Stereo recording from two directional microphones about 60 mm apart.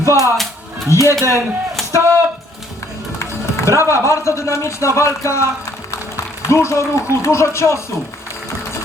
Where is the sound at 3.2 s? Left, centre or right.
Left.